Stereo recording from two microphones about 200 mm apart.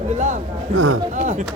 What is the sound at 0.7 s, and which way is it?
Speech, 90° right.